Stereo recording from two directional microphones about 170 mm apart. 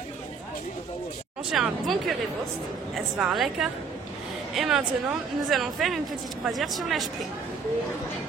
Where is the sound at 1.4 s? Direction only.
Centre (ahead or behind).